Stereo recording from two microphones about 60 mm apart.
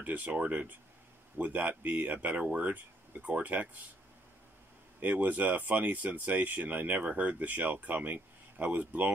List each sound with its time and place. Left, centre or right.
0.0 s speech: right
5.0 s speech: right